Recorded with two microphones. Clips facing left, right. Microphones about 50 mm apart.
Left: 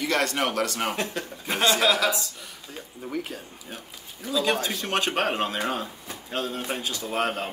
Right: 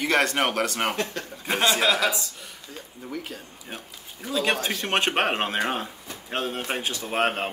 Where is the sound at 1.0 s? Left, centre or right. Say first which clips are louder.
Even; centre.